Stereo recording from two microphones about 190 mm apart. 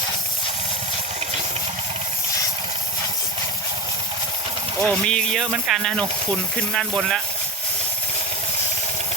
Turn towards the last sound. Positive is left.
turn(degrees=5)  # may be behind; listen again after turning